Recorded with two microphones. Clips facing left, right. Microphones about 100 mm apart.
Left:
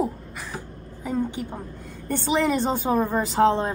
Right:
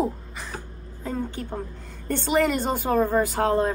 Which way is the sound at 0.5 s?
10° left (ahead or behind).